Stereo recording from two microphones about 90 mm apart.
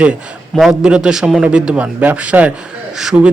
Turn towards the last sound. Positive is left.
turn(degrees=-5)  # may be behind; listen again after turning